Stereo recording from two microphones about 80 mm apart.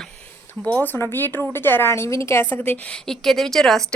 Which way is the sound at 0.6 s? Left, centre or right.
Left.